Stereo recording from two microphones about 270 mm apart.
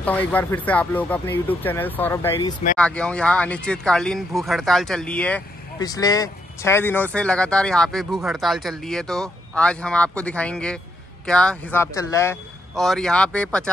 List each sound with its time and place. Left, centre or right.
0.0 s speech: centre
12.7 s speech: centre